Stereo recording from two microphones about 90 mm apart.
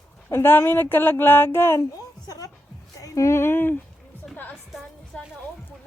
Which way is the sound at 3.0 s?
35° left (ahead or behind).